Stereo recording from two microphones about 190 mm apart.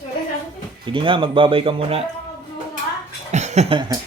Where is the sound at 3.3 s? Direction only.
35° right (ahead or behind).